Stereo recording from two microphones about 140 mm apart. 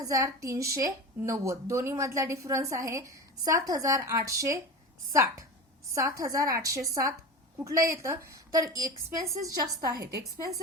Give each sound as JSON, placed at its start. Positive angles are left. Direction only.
{"t": 0.0, "sound": "a woman's voice", "side_deg": -25}
{"t": 5.9, "sound": "a woman's voice", "side_deg": -25}